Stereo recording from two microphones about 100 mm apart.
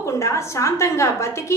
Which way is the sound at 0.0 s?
30° left (ahead or behind).